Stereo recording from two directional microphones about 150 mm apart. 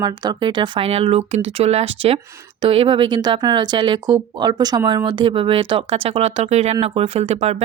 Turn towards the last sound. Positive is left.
turn(degrees=-45)  # may be behind; listen again after turning